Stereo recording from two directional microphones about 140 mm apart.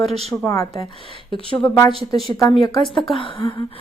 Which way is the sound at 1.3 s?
35° left (ahead or behind).